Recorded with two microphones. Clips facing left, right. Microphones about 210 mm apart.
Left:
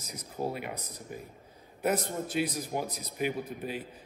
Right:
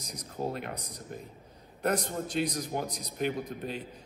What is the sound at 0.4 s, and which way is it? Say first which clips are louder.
A man's voice: even; 10° left (ahead or behind).